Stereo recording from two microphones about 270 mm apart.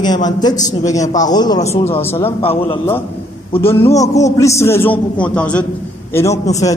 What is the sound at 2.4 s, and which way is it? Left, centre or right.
Speech, left.